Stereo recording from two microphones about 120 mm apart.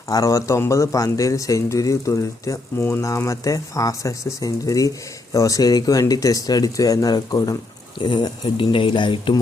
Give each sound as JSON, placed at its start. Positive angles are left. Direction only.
{"t": 0.1, "sound": "speech", "side_deg": 30}